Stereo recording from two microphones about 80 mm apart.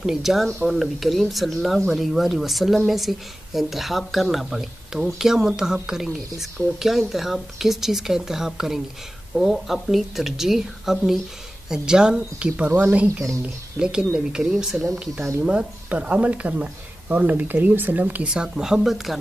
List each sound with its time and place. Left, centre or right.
0.0 s speech: centre; by 18.3 s right
18.3 s speech: centre